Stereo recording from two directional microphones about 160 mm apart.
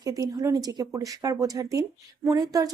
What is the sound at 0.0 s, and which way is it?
Speech, 25° right (ahead or behind).